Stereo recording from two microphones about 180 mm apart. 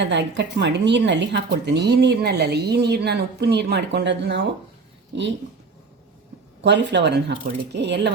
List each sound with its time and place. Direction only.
0.0 s a woman's voice: 75° right (ahead or behind)
6.6 s a woman's voice: 75° right (ahead or behind)